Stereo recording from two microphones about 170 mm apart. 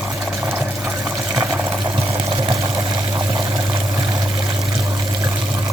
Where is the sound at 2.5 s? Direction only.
20° right (ahead or behind).